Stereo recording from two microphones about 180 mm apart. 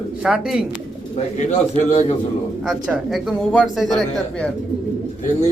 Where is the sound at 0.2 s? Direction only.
5° right (ahead or behind).